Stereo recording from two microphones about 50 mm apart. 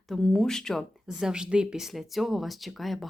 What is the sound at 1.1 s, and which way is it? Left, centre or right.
Speech, centre.